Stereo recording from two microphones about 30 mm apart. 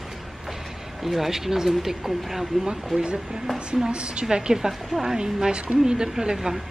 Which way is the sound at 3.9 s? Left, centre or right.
Right.